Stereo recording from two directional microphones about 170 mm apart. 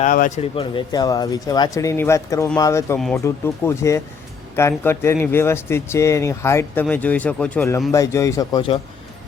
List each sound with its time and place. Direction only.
0.0 s speech: 50° left (ahead or behind)
0.5 s speech: 30° left (ahead or behind)